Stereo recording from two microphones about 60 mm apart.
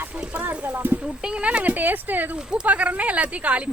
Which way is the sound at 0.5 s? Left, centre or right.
Right.